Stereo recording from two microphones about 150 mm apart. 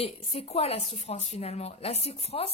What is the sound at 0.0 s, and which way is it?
A woman's voice, 40° left (ahead or behind).